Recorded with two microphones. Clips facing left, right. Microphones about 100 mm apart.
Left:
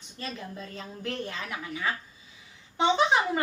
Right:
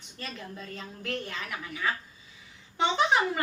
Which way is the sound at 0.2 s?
25° left (ahead or behind).